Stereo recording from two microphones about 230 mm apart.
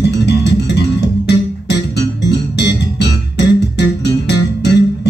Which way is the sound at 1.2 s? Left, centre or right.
Left.